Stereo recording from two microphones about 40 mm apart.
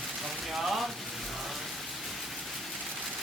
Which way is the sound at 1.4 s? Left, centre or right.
Centre.